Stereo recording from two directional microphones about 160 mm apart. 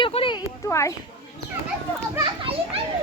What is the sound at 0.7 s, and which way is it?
Speech, 20° left (ahead or behind).